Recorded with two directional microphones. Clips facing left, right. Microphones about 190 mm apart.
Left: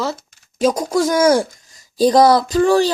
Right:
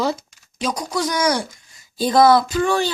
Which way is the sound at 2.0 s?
40° left (ahead or behind).